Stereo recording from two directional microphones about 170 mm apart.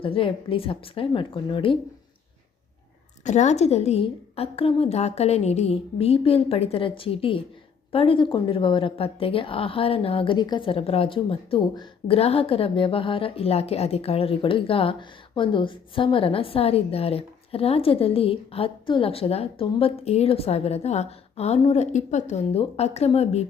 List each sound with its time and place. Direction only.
0.0 s a woman's voice: 30° left (ahead or behind)
3.2 s a woman's voice: 45° left (ahead or behind)